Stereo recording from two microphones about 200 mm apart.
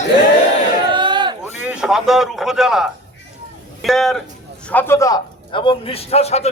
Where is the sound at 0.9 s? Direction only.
25° right (ahead or behind).